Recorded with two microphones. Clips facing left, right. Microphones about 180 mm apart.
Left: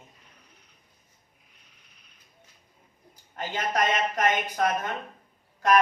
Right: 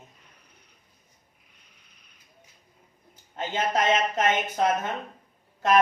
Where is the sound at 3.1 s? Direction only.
25° right (ahead or behind).